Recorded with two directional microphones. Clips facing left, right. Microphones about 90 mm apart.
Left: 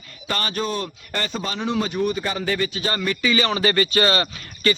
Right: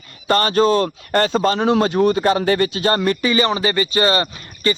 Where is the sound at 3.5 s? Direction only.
20° right (ahead or behind).